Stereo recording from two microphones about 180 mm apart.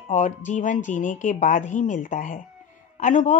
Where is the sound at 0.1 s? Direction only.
40° left (ahead or behind).